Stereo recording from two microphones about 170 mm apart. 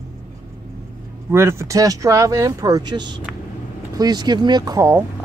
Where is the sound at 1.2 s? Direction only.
15° right (ahead or behind).